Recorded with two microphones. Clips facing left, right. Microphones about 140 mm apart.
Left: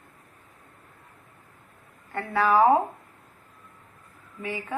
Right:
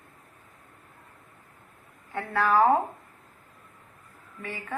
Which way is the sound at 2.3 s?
10° left (ahead or behind).